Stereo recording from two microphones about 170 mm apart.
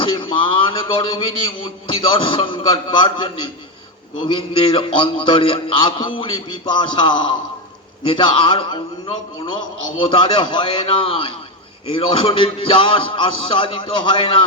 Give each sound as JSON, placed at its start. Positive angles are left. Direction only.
{"t": 0.0, "sound": "a sound", "side_deg": 30}
{"t": 1.5, "sound": "music", "side_deg": 30}
{"t": 6.7, "sound": "a man's voice", "side_deg": 30}
{"t": 8.0, "sound": "music", "side_deg": 30}
{"t": 10.1, "sound": "a man's voice", "side_deg": 30}
{"t": 11.9, "sound": "music", "side_deg": 30}